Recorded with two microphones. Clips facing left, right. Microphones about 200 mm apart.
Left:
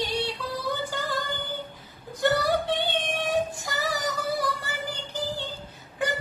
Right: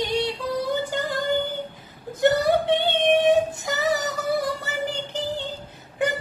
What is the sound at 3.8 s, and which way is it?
Music, 25° right (ahead or behind).